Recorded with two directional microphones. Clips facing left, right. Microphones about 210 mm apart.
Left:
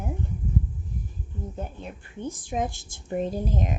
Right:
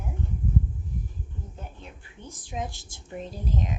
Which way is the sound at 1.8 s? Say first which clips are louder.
Left 10 dB; 50° left (ahead or behind).